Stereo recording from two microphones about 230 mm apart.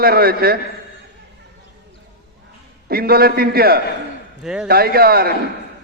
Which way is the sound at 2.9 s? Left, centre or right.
Right.